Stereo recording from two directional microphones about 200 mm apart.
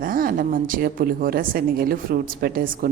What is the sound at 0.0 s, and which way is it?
A woman's voice, 45° right (ahead or behind).